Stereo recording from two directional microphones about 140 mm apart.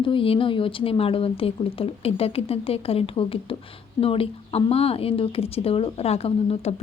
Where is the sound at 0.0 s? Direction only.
40° left (ahead or behind).